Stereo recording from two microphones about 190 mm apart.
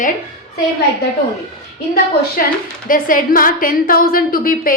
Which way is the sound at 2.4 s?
50° left (ahead or behind).